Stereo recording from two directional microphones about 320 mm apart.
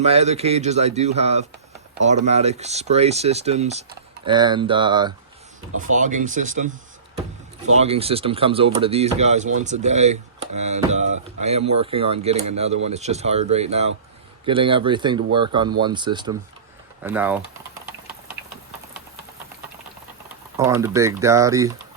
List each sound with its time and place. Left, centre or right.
0.0 s speech: centre
7.8 s speech: centre
20.6 s speech: centre